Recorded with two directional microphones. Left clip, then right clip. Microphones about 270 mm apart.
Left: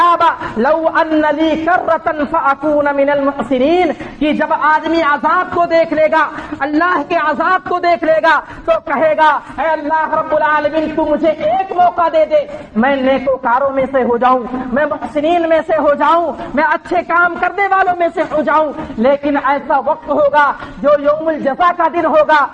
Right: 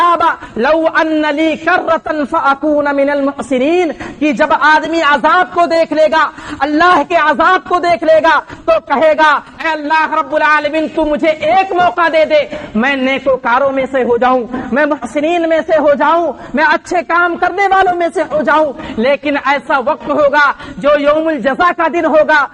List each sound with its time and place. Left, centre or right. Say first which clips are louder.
0.0 s a man's voice: even; right
11.9 s a man's voice: right 2 dB; right